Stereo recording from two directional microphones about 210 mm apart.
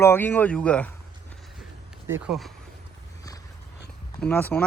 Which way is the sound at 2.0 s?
10° right (ahead or behind).